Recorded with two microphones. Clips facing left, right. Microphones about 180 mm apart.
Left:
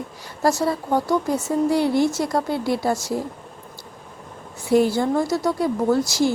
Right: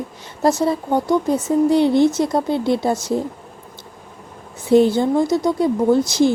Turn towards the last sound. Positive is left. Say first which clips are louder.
# right 4 dB
turn(degrees=-20)  # may be behind; listen again after turning